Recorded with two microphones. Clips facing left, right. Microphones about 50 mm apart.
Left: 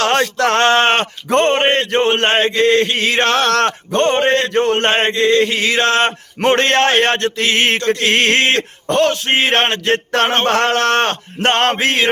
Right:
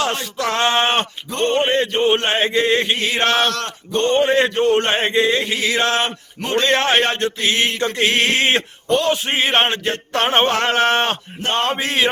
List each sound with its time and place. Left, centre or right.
0.0 s speech: left
1.9 s chant: left
2.6 s chant: centre
2.9 s speech: left
8.0 s mantra: left
8.9 s speech: left